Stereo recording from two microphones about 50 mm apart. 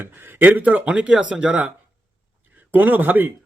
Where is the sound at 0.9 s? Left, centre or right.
Right.